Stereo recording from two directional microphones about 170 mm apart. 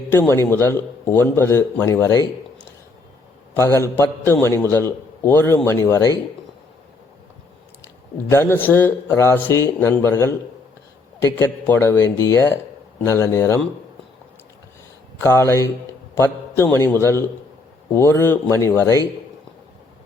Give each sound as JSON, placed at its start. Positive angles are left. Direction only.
{"t": 0.1, "sound": "speech", "side_deg": 15}
{"t": 3.5, "sound": "speech", "side_deg": 15}
{"t": 8.3, "sound": "speech", "side_deg": 15}
{"t": 11.3, "sound": "speech", "side_deg": 15}
{"t": 15.2, "sound": "a man's voice", "side_deg": 15}